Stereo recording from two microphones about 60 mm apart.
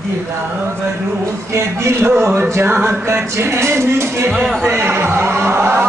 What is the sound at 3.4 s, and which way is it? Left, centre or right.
A man's voice, right.